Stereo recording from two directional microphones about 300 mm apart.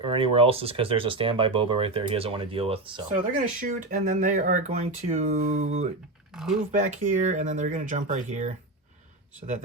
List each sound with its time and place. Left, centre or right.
0.0 s speech: centre
6.3 s speech: centre
6.7 s speech: right